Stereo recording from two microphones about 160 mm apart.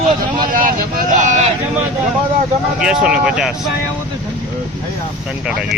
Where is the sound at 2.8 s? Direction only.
5° right (ahead or behind).